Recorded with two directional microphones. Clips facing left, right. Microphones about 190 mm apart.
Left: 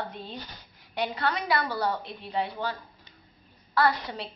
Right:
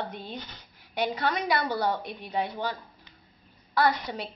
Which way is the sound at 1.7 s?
20° right (ahead or behind).